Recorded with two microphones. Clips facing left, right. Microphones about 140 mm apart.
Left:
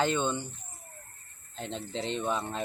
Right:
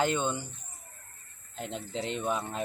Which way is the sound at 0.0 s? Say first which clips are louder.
Even; 10° right (ahead or behind).